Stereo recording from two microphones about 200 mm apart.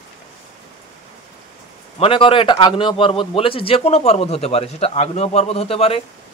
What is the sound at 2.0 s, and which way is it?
A man's voice, 25° left (ahead or behind).